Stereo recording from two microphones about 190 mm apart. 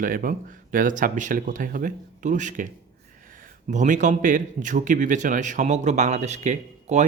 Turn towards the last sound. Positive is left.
turn(degrees=-40)  # may be behind; listen again after turning